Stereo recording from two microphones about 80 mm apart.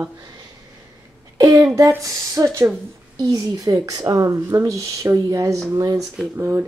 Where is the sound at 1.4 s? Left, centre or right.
Right.